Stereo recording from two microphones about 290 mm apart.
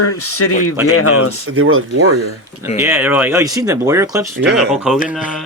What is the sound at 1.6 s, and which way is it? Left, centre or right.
Speech, right.